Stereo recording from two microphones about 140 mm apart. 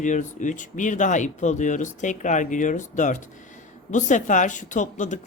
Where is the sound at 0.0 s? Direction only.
60° left (ahead or behind).